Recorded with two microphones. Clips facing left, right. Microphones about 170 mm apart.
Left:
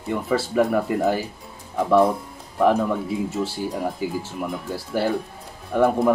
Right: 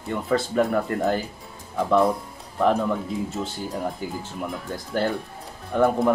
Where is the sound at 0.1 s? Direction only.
5° left (ahead or behind).